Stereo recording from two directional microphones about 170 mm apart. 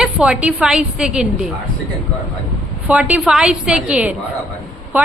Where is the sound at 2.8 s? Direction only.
10° right (ahead or behind).